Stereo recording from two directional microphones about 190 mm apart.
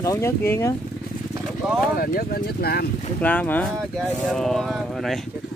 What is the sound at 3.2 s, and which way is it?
Speech, 10° left (ahead or behind).